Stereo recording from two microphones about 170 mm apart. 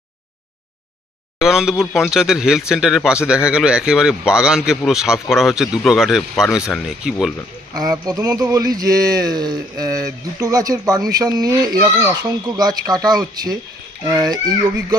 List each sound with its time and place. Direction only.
1.4 s speech: 5° right (ahead or behind)
7.7 s speech: 20° right (ahead or behind)